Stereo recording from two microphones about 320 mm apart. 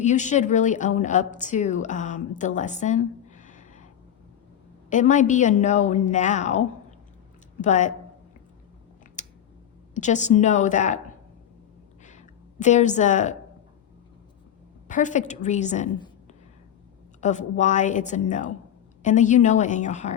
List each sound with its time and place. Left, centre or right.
0.0 s a woman's voice: left
4.9 s a woman's voice: left
9.2 s a sound: left
9.9 s a woman's voice: left
12.0 s a sound: left
14.8 s a woman's voice: left
17.2 s a woman's voice: left